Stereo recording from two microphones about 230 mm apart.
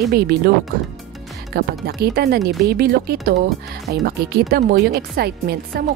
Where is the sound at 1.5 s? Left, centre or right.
Right.